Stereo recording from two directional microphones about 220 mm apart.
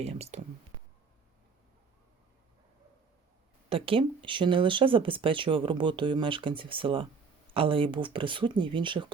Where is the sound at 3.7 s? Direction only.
25° right (ahead or behind).